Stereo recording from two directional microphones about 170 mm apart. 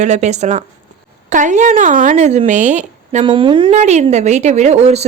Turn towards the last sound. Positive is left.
turn(degrees=-40)  # may be behind; listen again after turning